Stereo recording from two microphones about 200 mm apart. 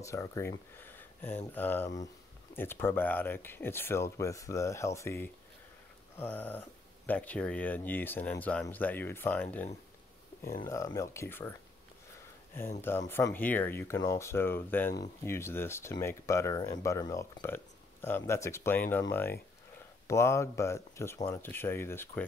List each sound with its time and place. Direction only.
0.0 s speech: 15° left (ahead or behind)
0.7 s a sound: 10° left (ahead or behind)
1.5 s speech: 10° left (ahead or behind)
13.1 s speech: 10° left (ahead or behind)